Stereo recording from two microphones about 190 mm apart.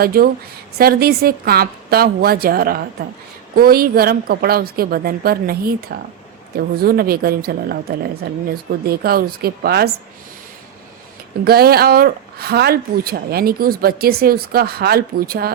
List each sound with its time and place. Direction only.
0.0 s speech: 50° right (ahead or behind)
11.4 s speech: 55° right (ahead or behind)